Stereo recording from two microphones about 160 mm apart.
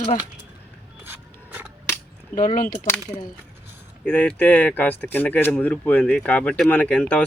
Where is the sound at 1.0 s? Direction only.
10° right (ahead or behind).